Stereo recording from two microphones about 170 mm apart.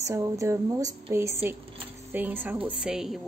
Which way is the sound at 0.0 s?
20° right (ahead or behind).